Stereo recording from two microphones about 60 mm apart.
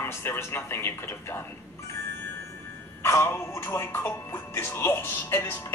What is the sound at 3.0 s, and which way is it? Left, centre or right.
Speech, left.